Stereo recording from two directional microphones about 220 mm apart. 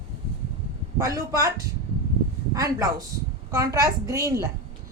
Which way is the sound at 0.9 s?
15° right (ahead or behind).